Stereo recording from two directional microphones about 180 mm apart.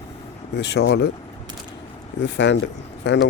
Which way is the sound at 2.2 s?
80° left.